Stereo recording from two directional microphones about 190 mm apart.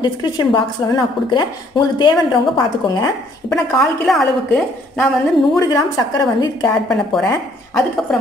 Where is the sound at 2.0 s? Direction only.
25° left (ahead or behind).